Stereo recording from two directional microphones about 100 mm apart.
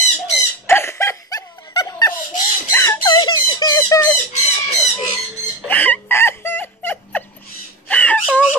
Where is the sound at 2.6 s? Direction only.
25° left (ahead or behind).